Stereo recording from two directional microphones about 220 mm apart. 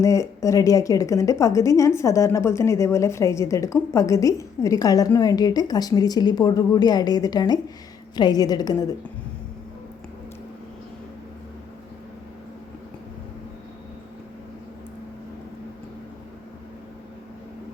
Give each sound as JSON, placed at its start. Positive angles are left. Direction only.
{"t": 0.0, "sound": "a woman's voice", "side_deg": 15}